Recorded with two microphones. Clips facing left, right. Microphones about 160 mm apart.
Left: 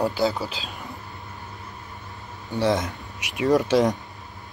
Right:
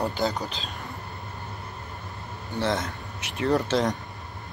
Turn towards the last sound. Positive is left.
turn(degrees=15)  # may be behind; listen again after turning